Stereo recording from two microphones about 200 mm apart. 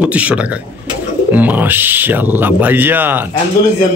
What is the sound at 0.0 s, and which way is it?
Speech, 5° right (ahead or behind).